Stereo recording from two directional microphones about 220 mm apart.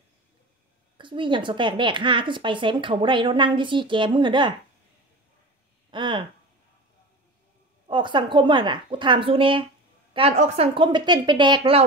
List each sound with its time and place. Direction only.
0.9 s a woman's voice: 20° right (ahead or behind)
5.9 s speech: 20° right (ahead or behind)
7.9 s a woman's voice: 20° right (ahead or behind)